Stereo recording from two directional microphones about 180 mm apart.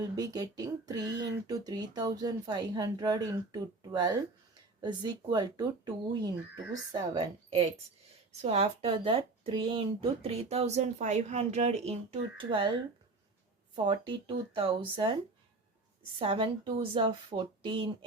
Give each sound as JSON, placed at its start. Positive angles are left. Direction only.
{"t": 0.0, "sound": "a woman's voice", "side_deg": -20}
{"t": 13.7, "sound": "speech", "side_deg": -25}
{"t": 16.1, "sound": "speech", "side_deg": -30}